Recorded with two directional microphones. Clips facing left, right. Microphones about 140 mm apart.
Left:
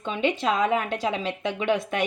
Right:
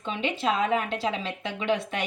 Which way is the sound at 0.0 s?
40° left (ahead or behind).